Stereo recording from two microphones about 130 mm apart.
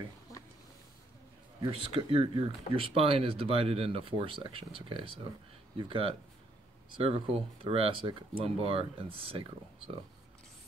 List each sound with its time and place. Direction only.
1.6 s speech: 45° right (ahead or behind)